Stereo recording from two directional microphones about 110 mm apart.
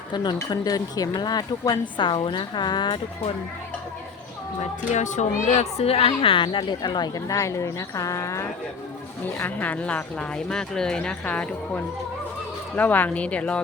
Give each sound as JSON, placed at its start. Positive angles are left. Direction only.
{"t": 0.1, "sound": "a woman's voice", "side_deg": 45}
{"t": 4.9, "sound": "a woman's voice", "side_deg": 90}
{"t": 9.2, "sound": "speech", "side_deg": 15}